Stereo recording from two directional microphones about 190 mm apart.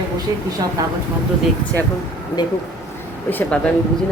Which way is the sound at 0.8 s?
20° right (ahead or behind).